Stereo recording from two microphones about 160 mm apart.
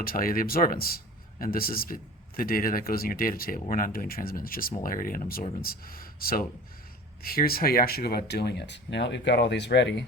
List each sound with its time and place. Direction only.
0.0 s a man's voice: 65° left (ahead or behind); by 10.1 s 90° left